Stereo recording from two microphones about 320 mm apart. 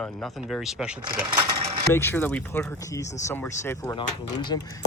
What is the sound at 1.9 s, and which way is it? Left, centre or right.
Speech, centre.